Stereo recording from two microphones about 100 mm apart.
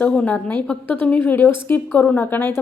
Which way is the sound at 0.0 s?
15° left (ahead or behind).